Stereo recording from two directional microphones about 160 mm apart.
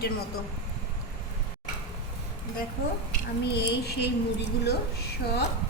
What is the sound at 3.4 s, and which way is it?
Speech, 90° left.